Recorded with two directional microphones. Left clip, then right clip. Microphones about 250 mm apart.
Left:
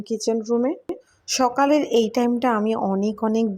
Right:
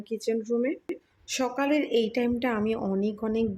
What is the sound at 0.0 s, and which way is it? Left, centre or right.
Speech, centre.